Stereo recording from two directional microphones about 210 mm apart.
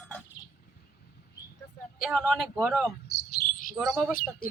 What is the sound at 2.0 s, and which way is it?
Speech, centre (ahead or behind).